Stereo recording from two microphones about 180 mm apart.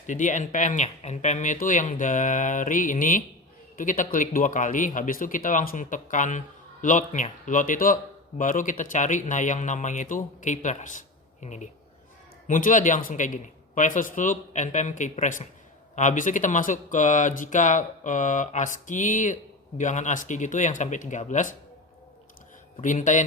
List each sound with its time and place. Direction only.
0.1 s speech: 45° left (ahead or behind)
22.8 s speech: 45° left (ahead or behind)